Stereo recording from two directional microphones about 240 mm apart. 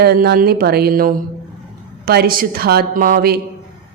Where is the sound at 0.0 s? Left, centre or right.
Right.